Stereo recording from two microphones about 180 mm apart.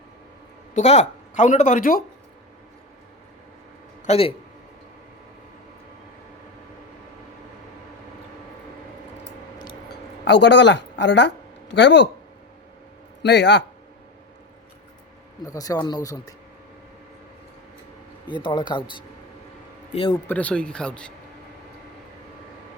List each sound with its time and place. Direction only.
0.8 s speech: 40° left (ahead or behind)
4.0 s speech: 35° left (ahead or behind)
9.9 s a man's voice: 75° left (ahead or behind)
13.2 s a man's voice: 70° left (ahead or behind)
15.4 s speech: 20° left (ahead or behind)
18.3 s speech: 25° left (ahead or behind)
20.2 s speech: 10° left (ahead or behind)